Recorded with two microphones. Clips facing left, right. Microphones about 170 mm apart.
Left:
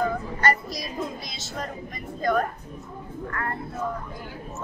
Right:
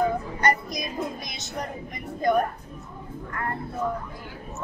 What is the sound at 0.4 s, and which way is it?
A woman's voice, 20° right (ahead or behind).